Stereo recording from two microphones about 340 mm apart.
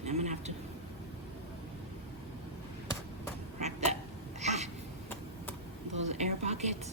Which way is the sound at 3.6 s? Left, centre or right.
Centre.